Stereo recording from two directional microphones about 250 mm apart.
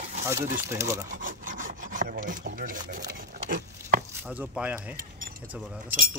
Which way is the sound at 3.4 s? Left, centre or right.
Right.